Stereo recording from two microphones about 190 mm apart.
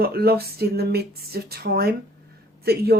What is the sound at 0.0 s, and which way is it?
Speech, 55° right (ahead or behind).